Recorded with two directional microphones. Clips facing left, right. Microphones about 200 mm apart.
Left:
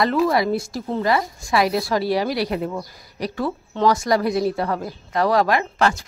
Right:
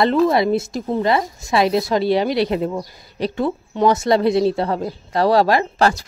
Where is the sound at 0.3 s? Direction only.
25° right (ahead or behind).